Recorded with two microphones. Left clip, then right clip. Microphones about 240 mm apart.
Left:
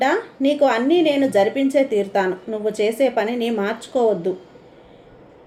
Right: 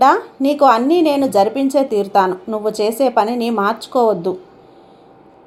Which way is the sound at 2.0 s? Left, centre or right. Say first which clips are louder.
Right 6 dB; right.